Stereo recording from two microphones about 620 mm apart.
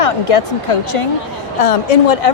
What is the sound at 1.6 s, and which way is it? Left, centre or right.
Speech, left.